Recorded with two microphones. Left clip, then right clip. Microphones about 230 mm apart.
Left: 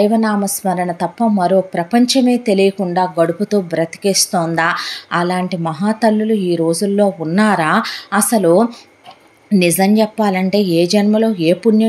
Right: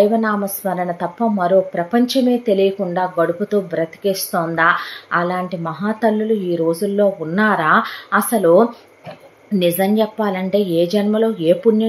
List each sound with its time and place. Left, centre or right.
0.0 s a woman's voice: left